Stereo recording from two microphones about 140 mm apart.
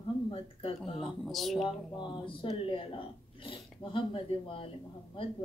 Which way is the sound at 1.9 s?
30° left (ahead or behind).